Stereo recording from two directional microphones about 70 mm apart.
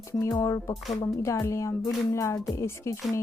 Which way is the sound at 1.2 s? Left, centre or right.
Left.